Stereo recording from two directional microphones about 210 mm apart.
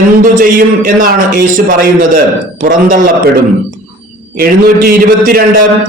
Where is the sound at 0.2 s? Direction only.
40° right (ahead or behind).